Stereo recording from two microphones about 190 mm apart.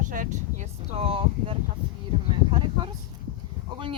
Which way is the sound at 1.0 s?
30° right (ahead or behind).